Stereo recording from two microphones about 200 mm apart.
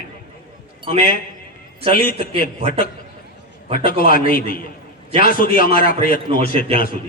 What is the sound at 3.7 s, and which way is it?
A man's voice, 45° left (ahead or behind).